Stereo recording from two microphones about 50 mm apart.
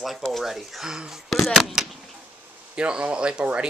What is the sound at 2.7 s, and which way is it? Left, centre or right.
Speech, right.